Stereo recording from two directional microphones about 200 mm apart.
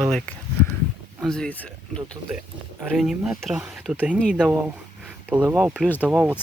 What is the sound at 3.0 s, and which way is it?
Speech, centre (ahead or behind).